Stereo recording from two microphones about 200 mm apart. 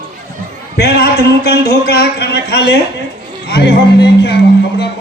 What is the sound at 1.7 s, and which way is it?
Speech, 55° left (ahead or behind).